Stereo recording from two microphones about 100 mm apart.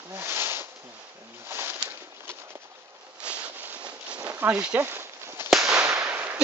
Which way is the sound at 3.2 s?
10° right (ahead or behind).